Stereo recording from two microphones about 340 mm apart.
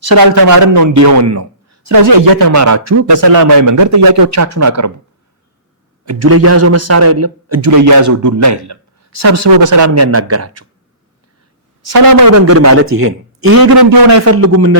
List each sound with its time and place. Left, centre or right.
0.0 s a man's voice: right
6.1 s a man's voice: right
7.7 s a man's voice: right
11.9 s a woman's voice: right
12.3 s a man's voice: right